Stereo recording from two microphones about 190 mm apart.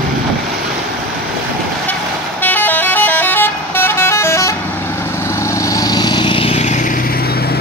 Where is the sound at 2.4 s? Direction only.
10° left (ahead or behind).